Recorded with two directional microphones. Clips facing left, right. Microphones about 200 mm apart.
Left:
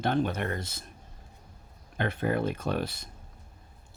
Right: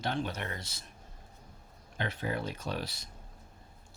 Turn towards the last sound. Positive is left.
turn(degrees=55)  # may be behind; listen again after turning